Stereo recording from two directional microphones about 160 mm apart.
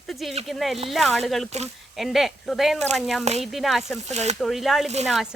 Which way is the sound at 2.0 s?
Centre (ahead or behind).